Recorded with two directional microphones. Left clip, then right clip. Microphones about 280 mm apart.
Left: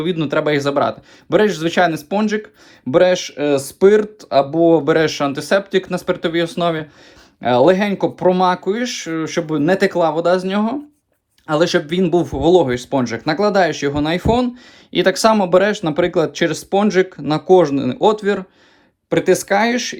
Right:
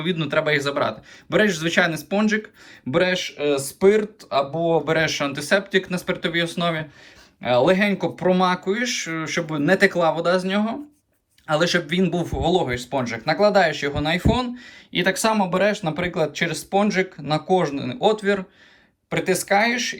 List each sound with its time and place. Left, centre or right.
0.0 s speech: centre